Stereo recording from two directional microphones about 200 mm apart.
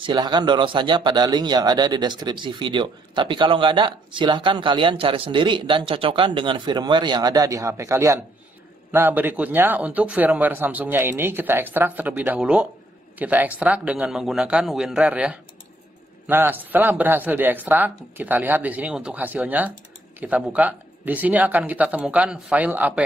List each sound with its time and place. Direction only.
0.0 s a man's voice: 20° right (ahead or behind)